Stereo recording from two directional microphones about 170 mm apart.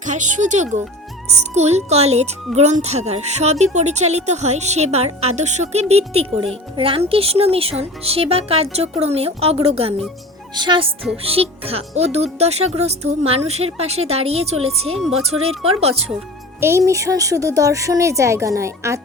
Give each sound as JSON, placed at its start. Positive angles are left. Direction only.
{"t": 0.0, "sound": "a child's voice", "side_deg": -45}
{"t": 10.5, "sound": "a child's voice", "side_deg": -25}
{"t": 16.6, "sound": "a woman's voice", "side_deg": -15}